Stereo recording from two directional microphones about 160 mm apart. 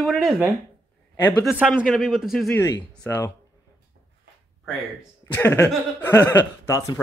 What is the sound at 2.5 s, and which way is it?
Speech, 20° left (ahead or behind).